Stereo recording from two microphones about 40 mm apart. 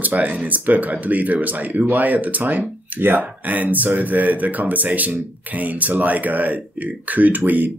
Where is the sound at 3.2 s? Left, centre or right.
Right.